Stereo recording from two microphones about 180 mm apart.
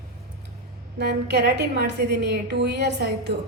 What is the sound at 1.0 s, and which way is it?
A woman's voice, 65° right (ahead or behind).